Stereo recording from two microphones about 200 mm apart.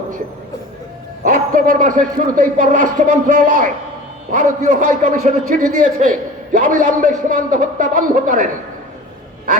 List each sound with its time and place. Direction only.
1.2 s a man's voice: 40° right (ahead or behind)